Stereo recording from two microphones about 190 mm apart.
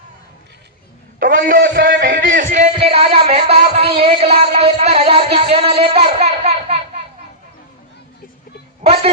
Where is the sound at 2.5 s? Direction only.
35° right (ahead or behind).